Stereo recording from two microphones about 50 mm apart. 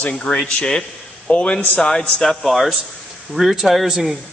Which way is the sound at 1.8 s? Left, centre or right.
Centre.